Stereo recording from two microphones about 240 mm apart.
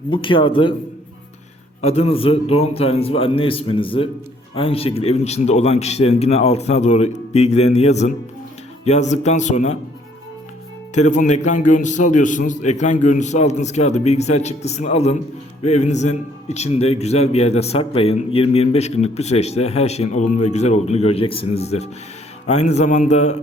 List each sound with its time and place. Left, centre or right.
0.1 s a man's voice: left
1.8 s a man's voice: left
10.9 s a man's voice: left